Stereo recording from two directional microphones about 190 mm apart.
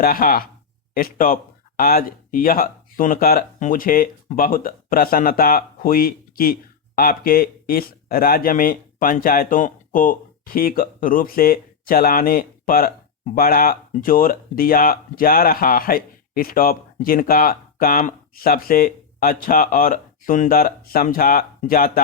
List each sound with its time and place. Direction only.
0.0 s speech: 50° left (ahead or behind)